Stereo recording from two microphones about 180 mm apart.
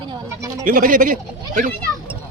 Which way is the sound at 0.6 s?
50° right (ahead or behind).